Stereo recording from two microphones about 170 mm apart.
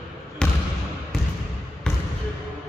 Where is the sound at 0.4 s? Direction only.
5° left (ahead or behind).